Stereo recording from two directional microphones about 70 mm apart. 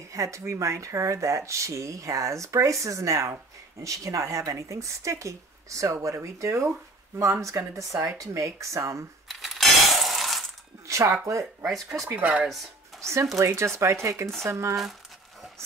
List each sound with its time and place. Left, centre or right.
0.1 s speech: right
9.3 s coin: centre
10.9 s a sound: right
11.6 s speech: centre
12.2 s speech: centre
13.0 s speech: right